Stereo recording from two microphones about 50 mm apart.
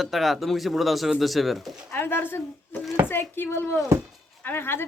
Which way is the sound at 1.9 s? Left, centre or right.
Left.